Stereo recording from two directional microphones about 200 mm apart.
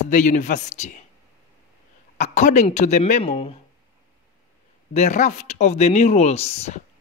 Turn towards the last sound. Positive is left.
turn(degrees=30)  # may be behind; listen again after turning